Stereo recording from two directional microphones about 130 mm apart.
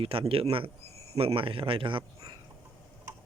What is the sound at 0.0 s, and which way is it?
A man's voice, 45° right (ahead or behind).